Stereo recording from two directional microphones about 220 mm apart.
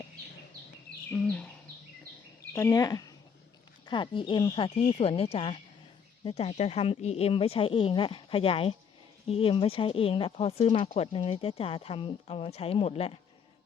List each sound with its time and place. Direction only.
2.5 s speech: 10° left (ahead or behind)